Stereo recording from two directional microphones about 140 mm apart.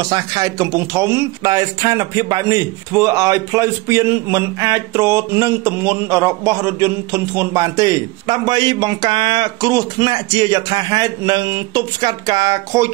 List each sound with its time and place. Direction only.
0.0 s speech: 30° right (ahead or behind)